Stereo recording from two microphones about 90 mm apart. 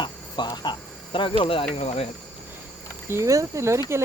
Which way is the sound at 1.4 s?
85° left.